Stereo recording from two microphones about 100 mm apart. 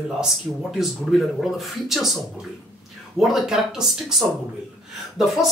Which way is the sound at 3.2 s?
5° right (ahead or behind).